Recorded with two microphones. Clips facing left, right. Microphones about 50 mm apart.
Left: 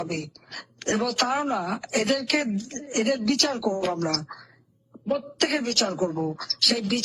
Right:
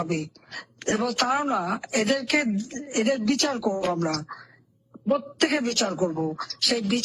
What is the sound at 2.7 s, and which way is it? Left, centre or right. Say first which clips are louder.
Speech: even; centre.